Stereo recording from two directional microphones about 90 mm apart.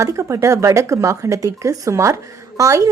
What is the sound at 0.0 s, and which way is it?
Speech, 35° right (ahead or behind).